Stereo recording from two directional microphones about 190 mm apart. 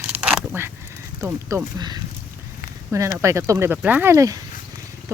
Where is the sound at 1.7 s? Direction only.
20° right (ahead or behind).